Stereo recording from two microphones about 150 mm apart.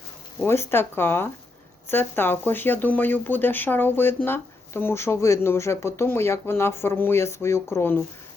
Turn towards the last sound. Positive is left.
turn(degrees=15)  # may be behind; listen again after turning